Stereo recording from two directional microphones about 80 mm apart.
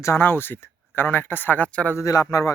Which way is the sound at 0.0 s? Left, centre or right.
Left.